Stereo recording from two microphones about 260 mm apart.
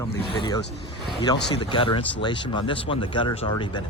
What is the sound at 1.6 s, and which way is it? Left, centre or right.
Speech, centre.